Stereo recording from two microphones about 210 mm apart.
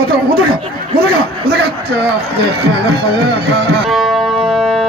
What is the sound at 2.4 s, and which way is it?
Speech, 50° right (ahead or behind).